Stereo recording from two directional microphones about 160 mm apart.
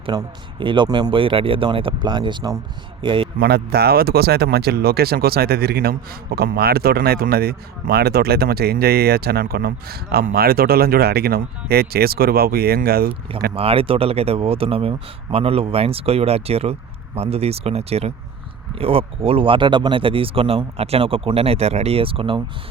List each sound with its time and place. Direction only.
0.0 s a man's voice: 30° right (ahead or behind)
3.3 s speech: 75° right (ahead or behind)
13.5 s speech: 35° right (ahead or behind)